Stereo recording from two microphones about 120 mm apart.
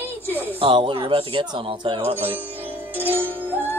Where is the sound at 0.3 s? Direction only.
15° right (ahead or behind).